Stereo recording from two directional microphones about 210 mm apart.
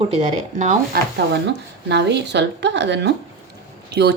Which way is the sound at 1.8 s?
55° right (ahead or behind).